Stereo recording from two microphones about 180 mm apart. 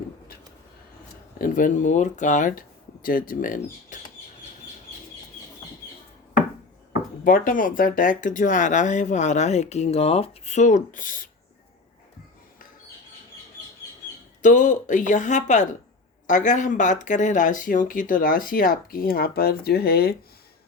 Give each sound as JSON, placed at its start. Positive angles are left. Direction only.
{"t": 1.4, "sound": "speech", "side_deg": 45}
{"t": 7.3, "sound": "speech", "side_deg": 50}
{"t": 14.4, "sound": "speech", "side_deg": 45}